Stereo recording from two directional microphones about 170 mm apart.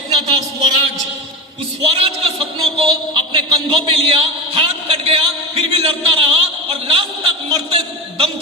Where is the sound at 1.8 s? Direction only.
35° right (ahead or behind).